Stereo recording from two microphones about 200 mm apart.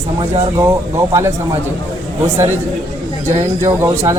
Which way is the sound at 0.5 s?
15° right (ahead or behind).